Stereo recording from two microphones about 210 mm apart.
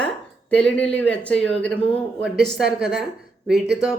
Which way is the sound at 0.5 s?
5° left (ahead or behind).